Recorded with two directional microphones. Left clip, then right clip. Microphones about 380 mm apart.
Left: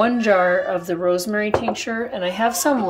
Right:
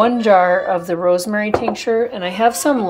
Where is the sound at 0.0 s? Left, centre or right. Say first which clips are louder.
Right 4 dB; centre.